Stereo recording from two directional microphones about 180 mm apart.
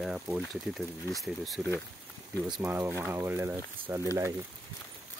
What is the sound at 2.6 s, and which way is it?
Speech, 10° right (ahead or behind).